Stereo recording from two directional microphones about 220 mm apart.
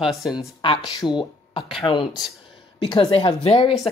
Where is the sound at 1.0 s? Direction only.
20° left (ahead or behind).